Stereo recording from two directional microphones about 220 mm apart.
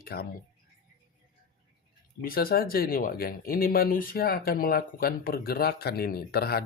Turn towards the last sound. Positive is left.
turn(degrees=45)  # may be behind; listen again after turning